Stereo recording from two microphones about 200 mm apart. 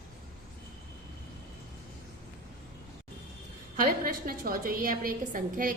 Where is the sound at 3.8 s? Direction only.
45° right (ahead or behind).